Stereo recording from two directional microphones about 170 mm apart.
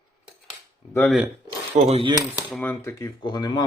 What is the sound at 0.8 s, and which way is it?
Speech, 30° left (ahead or behind).